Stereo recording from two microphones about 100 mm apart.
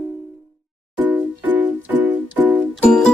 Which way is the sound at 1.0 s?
15° right (ahead or behind).